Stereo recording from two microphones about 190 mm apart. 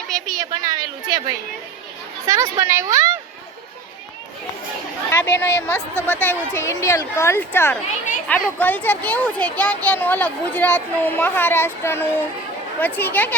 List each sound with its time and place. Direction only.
0.3 s a sound: 20° right (ahead or behind)
2.2 s a woman's voice: 15° right (ahead or behind)
5.1 s speech: 10° left (ahead or behind)